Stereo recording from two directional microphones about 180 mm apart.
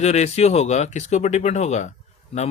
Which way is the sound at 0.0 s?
35° left (ahead or behind).